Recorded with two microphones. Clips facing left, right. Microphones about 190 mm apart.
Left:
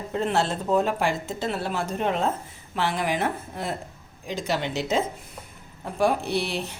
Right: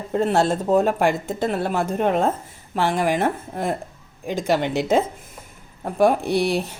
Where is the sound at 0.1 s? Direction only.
45° right (ahead or behind).